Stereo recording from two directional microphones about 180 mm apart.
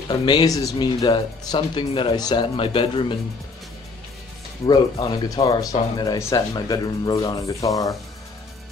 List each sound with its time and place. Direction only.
0.2 s speech: 25° left (ahead or behind)
4.6 s speech: 25° left (ahead or behind)